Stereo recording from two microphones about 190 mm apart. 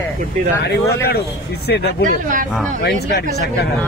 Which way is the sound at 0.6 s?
60° left (ahead or behind).